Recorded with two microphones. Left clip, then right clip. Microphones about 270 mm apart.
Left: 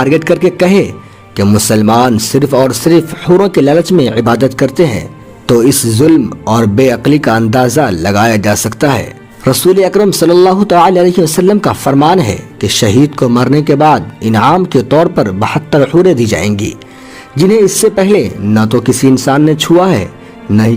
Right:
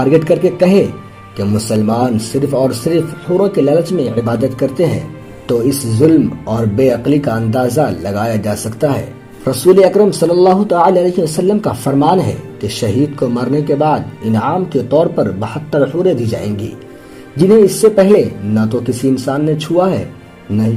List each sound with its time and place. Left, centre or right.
0.0 s speech: left